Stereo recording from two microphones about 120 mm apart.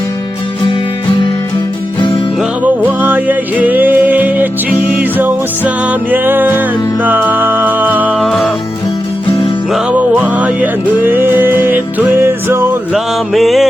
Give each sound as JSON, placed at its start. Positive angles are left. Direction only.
{"t": 2.6, "sound": "music", "side_deg": -15}
{"t": 8.2, "sound": "music", "side_deg": 0}
{"t": 9.7, "sound": "music", "side_deg": -10}
{"t": 12.9, "sound": "music", "side_deg": 0}